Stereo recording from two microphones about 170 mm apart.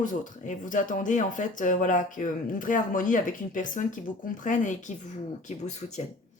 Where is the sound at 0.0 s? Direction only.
50° left (ahead or behind).